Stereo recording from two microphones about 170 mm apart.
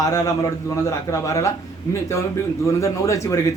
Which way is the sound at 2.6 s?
15° left (ahead or behind).